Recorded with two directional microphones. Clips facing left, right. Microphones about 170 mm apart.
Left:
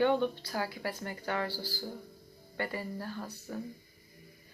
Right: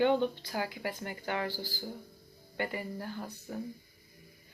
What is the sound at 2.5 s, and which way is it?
Speech, 20° right (ahead or behind).